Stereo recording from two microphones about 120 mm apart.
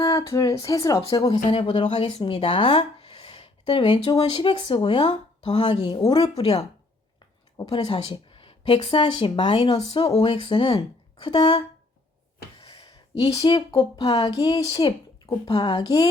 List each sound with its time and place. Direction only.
0.0 s speech: 30° left (ahead or behind)
1.5 s speech: 50° left (ahead or behind)
6.2 s speech: 55° left (ahead or behind)
7.7 s speech: 55° left (ahead or behind)
8.1 s speech: 45° left (ahead or behind)
9.6 s speech: 60° left (ahead or behind)
10.2 s speech: 40° left (ahead or behind)
12.5 s a sound: 45° left (ahead or behind)
13.2 s speech: 35° left (ahead or behind)
15.4 s speech: 45° left (ahead or behind)